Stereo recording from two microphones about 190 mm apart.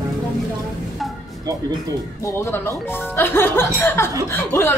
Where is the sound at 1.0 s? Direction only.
Centre (ahead or behind).